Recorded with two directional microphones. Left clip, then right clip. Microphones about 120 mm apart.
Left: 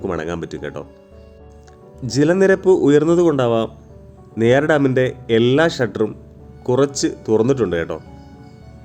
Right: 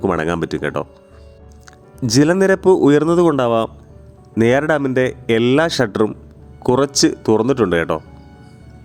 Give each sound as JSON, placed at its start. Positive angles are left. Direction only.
{"t": 0.0, "sound": "speech", "side_deg": -90}
{"t": 2.0, "sound": "speech", "side_deg": -90}